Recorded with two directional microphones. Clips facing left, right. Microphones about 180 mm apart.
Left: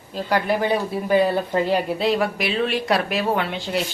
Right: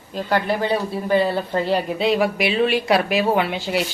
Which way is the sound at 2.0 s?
Centre (ahead or behind).